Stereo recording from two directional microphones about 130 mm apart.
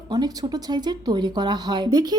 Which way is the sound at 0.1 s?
30° right (ahead or behind).